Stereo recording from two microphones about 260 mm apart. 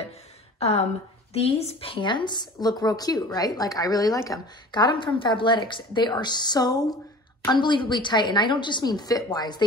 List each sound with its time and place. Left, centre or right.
0.6 s a woman's voice: left